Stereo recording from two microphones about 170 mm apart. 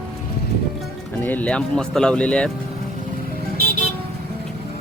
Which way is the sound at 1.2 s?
10° left (ahead or behind).